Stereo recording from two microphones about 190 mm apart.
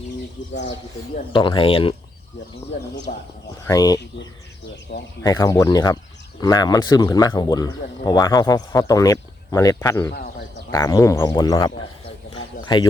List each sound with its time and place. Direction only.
1.3 s speech: 25° left (ahead or behind)
3.1 s speech: 45° left (ahead or behind)
3.7 s speech: 20° left (ahead or behind)
5.2 s speech: 20° left (ahead or behind)
12.7 s speech: 25° left (ahead or behind)